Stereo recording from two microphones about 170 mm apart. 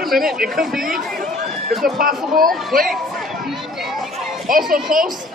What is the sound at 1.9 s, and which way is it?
Speech, 55° right (ahead or behind).